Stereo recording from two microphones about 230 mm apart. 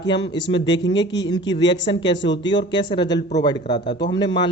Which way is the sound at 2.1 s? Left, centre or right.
Left.